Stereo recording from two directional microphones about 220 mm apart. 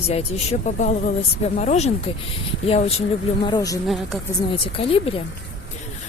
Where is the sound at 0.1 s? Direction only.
30° left (ahead or behind).